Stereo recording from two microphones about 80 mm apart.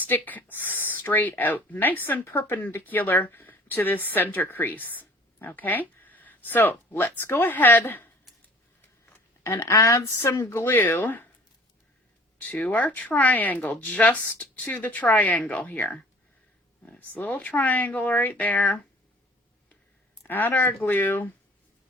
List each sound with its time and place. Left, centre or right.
0.0 s speech: left
9.4 s speech: left
12.4 s speech: centre
20.2 s speech: left